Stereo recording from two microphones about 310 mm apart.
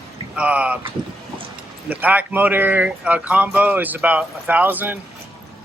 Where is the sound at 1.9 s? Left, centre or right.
Centre.